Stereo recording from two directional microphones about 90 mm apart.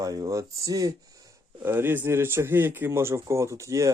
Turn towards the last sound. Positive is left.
turn(degrees=-35)  # may be behind; listen again after turning